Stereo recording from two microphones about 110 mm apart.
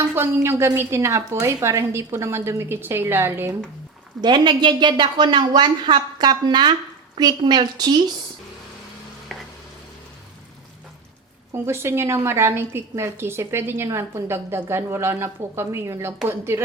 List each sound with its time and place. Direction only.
0.1 s a woman's voice: 20° right (ahead or behind)
4.2 s a woman's voice: 40° right (ahead or behind)
9.3 s stir: centre (ahead or behind)
11.5 s a woman's voice: 25° right (ahead or behind)